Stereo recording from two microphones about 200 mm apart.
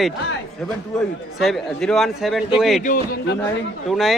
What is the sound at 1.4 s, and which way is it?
A man's voice, centre (ahead or behind).